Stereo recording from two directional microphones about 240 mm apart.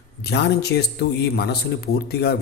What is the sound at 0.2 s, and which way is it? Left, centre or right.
Speech, left.